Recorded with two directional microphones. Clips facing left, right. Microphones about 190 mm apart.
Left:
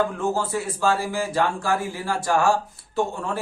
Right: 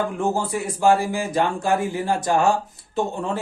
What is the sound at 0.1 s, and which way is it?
Speech, 15° right (ahead or behind).